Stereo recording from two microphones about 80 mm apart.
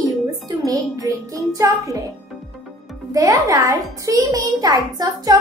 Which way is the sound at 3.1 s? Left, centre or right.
Right.